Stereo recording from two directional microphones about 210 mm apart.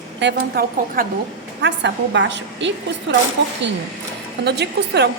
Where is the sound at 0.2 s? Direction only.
55° right (ahead or behind).